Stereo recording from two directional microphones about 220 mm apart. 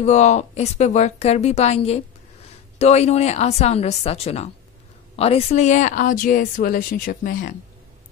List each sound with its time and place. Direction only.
0.0 s speech: 30° left (ahead or behind)